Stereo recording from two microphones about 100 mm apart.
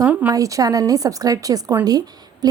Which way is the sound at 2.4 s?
40° right (ahead or behind).